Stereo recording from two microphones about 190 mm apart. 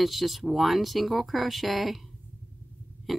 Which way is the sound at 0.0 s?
Centre (ahead or behind).